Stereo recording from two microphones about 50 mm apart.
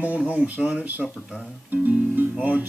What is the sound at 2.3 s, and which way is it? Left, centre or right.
Speech, right.